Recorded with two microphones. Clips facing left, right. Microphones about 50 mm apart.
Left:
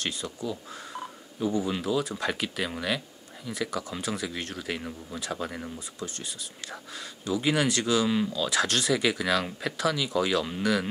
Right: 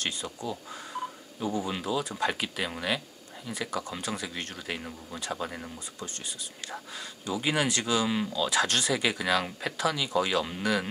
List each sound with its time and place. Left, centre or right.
0.0 s speech: centre